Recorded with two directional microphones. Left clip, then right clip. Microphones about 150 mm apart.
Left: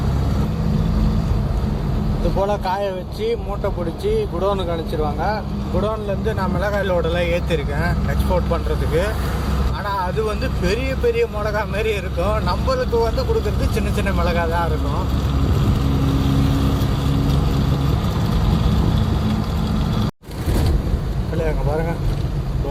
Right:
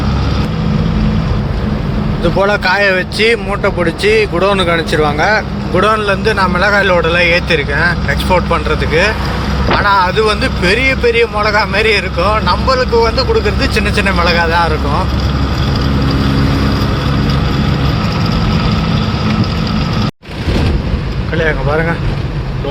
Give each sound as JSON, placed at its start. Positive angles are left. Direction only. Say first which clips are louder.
{"t": 2.4, "sound": "speech", "louder": "right 10 dB", "side_deg": 0}
{"t": 6.2, "sound": "speech", "louder": "right 10 dB", "side_deg": 0}
{"t": 21.3, "sound": "speech", "louder": "right 9 dB", "side_deg": 0}